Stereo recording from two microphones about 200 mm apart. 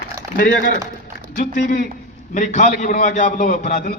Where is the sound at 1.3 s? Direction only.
45° left (ahead or behind).